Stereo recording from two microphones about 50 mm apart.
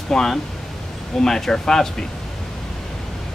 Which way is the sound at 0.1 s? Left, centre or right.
Centre.